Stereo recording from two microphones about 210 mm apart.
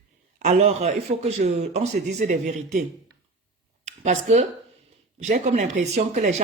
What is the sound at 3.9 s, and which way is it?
Speech, 35° right (ahead or behind).